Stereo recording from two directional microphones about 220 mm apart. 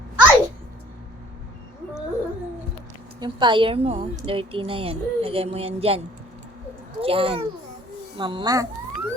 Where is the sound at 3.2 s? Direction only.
20° right (ahead or behind).